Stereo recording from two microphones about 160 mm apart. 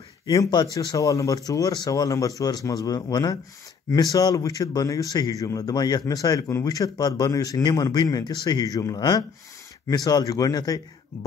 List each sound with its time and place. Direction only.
0.3 s speech: 25° left (ahead or behind)